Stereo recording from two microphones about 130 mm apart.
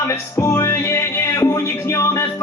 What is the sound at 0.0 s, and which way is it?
Music, 20° left (ahead or behind).